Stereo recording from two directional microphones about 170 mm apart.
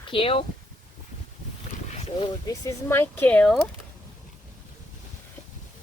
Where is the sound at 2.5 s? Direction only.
15° left (ahead or behind).